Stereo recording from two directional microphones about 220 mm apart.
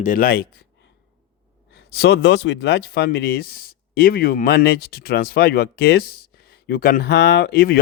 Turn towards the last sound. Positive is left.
turn(degrees=45)  # may be behind; listen again after turning